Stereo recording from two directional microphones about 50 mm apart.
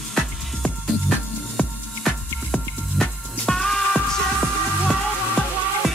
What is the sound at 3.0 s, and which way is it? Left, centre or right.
Music, centre.